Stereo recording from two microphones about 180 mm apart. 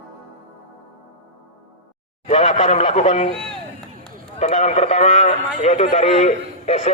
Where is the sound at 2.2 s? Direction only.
35° left (ahead or behind).